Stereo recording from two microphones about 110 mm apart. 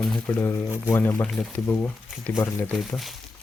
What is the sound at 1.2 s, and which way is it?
Speech, centre (ahead or behind).